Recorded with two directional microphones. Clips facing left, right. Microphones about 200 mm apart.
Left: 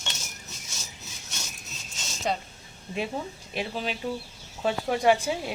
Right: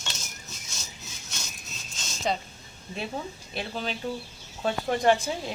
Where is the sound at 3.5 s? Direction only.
10° left (ahead or behind).